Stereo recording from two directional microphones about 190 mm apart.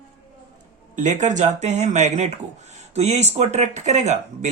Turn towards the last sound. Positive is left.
turn(degrees=-35)  # may be behind; listen again after turning